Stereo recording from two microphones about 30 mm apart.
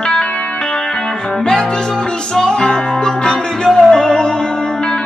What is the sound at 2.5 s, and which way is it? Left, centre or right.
Music, left.